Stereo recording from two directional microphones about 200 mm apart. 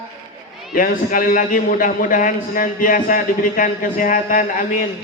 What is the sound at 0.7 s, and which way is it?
A man's voice, 45° left (ahead or behind).